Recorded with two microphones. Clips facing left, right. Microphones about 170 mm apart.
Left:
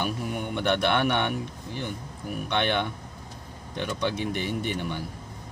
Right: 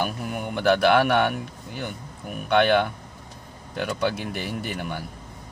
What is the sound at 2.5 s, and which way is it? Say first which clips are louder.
Speech: right 7 dB; 85° right.